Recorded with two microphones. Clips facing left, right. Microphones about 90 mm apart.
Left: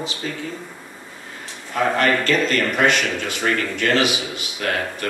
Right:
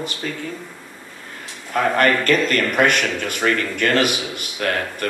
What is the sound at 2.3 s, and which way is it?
Speech, 50° right (ahead or behind).